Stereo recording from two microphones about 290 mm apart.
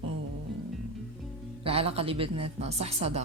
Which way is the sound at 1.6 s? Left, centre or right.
Centre.